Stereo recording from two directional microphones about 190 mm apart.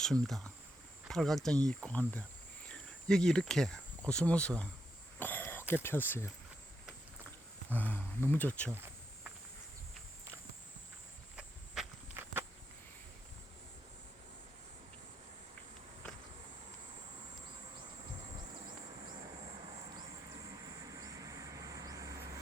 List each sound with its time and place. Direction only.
0.0 s speech: centre (ahead or behind)
5.2 s throat clearing: 10° left (ahead or behind)
5.7 s speech: 10° left (ahead or behind)
7.7 s speech: 10° left (ahead or behind)
11.3 s walk: 5° right (ahead or behind)
20.9 s vehicle: 15° right (ahead or behind)